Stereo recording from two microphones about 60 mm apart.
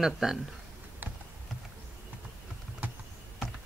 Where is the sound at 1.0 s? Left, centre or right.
Right.